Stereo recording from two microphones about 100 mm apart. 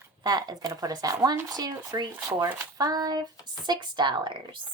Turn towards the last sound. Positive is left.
turn(degrees=-50)  # may be behind; listen again after turning